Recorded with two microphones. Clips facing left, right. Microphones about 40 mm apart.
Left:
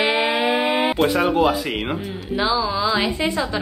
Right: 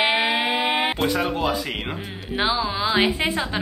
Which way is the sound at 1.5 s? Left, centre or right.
Centre.